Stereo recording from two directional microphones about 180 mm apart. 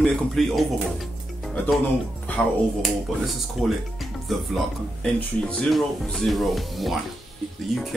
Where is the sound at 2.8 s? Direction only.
Centre (ahead or behind).